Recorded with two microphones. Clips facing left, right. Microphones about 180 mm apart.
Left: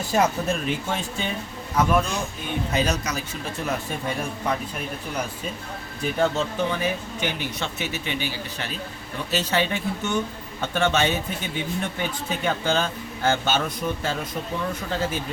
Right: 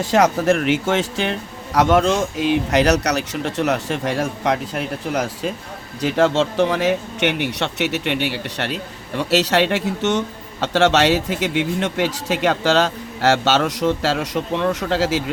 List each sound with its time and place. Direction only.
0.0 s speech: 90° right